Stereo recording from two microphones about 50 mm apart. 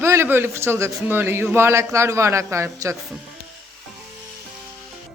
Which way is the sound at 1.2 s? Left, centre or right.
Right.